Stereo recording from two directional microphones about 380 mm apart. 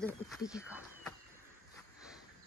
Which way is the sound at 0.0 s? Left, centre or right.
Centre.